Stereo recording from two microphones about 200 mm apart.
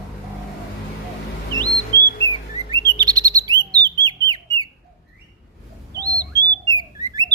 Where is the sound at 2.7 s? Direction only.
20° right (ahead or behind).